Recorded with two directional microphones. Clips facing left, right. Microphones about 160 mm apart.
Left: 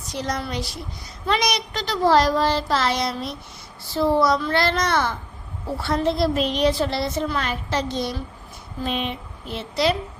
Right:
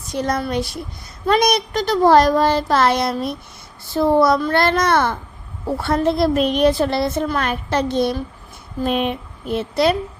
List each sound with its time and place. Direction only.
0.1 s a woman's voice: 55° right (ahead or behind)